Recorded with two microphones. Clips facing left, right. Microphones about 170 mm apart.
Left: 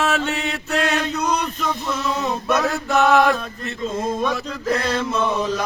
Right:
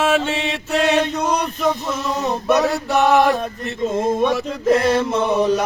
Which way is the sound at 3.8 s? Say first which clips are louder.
Right 5 dB; 25° right (ahead or behind).